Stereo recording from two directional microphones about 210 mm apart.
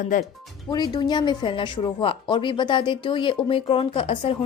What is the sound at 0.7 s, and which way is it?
Speech, 20° left (ahead or behind).